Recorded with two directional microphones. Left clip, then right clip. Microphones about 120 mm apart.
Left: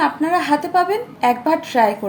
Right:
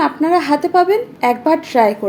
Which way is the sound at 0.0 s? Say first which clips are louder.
Right 3 dB; 40° right (ahead or behind).